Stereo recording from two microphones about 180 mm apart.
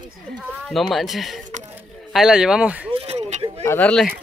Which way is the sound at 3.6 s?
10° left (ahead or behind).